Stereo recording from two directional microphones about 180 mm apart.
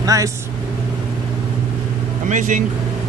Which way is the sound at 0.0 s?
20° right (ahead or behind).